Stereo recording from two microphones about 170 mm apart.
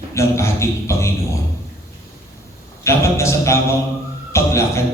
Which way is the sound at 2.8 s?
15° left (ahead or behind).